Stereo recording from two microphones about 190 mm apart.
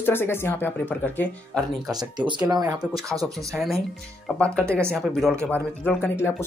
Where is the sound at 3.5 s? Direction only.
Centre (ahead or behind).